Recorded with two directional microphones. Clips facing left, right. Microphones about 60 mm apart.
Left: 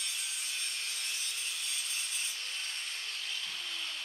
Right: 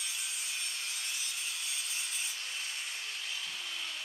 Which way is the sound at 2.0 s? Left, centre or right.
Centre.